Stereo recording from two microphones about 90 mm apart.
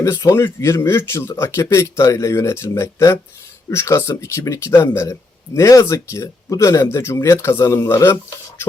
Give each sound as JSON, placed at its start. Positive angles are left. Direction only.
{"t": 0.0, "sound": "speech", "side_deg": 35}